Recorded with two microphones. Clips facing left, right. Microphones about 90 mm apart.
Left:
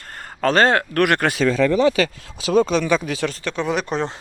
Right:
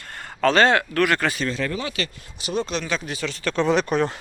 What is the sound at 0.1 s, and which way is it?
Speech, 40° left (ahead or behind).